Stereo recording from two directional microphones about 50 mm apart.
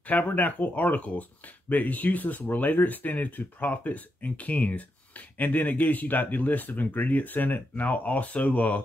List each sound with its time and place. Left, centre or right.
0.0 s speech: left